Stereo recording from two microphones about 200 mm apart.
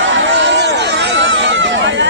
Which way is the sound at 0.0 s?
65° right (ahead or behind).